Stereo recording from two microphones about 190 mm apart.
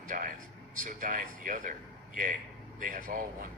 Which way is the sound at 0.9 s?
45° right (ahead or behind).